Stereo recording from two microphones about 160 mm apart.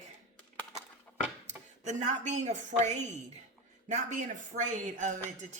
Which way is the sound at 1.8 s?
50° right (ahead or behind).